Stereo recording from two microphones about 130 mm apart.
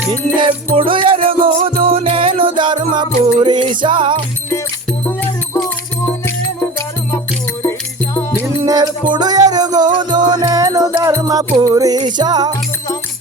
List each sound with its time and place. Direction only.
0.3 s music: 40° right (ahead or behind)
6.2 s music: 20° left (ahead or behind)
8.4 s music: 30° right (ahead or behind)